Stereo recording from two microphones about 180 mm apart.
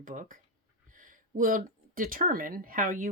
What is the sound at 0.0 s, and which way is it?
Speech, 45° right (ahead or behind).